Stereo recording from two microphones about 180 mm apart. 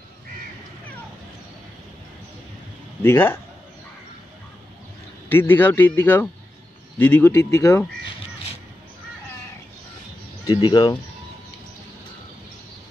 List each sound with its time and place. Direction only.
3.0 s speech: 10° left (ahead or behind)
5.3 s speech: 10° left (ahead or behind)
10.4 s speech: 25° left (ahead or behind)